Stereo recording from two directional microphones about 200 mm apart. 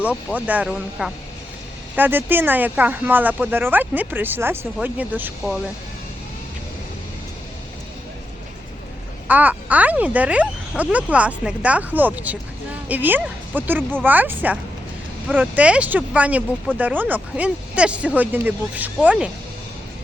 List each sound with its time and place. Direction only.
0.0 s speech: 5° right (ahead or behind)
9.2 s speech: 10° right (ahead or behind)